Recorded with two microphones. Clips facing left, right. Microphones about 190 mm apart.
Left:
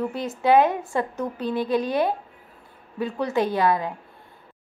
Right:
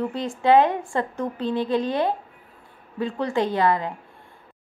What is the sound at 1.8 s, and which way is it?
Speech, 10° left (ahead or behind).